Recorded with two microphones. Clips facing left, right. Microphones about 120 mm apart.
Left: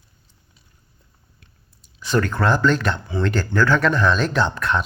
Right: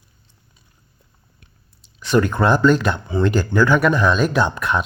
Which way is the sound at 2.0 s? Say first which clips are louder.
Right 4 dB; 15° right (ahead or behind).